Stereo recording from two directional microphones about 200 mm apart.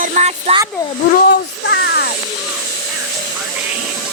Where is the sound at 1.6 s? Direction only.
60° left (ahead or behind).